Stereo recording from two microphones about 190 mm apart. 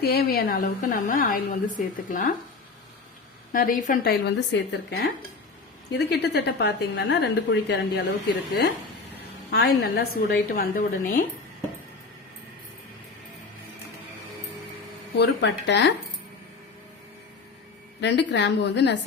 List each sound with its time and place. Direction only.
0.0 s a woman's voice: 55° left (ahead or behind)
3.5 s a woman's voice: 45° left (ahead or behind)
4.3 s speech: 65° left (ahead or behind)
9.5 s a woman's voice: 55° left (ahead or behind)
15.2 s speech: 65° left (ahead or behind)
18.0 s speech: 65° left (ahead or behind)